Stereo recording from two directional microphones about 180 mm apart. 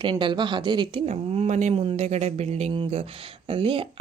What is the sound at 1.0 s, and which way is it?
Speech, 40° right (ahead or behind).